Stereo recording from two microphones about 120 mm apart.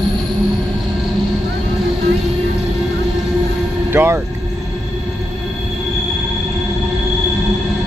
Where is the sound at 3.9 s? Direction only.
20° right (ahead or behind).